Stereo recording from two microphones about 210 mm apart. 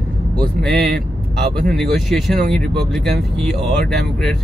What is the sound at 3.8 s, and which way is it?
Speech, 50° right (ahead or behind).